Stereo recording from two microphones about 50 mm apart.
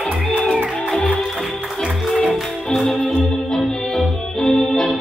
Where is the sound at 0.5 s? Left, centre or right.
Centre.